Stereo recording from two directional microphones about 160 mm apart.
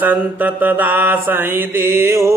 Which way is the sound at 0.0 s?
10° right (ahead or behind).